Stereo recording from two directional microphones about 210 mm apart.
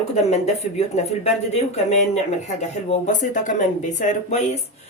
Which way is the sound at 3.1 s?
35° left (ahead or behind).